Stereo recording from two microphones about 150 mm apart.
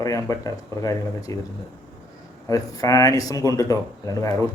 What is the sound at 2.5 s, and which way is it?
Speech, 25° left (ahead or behind).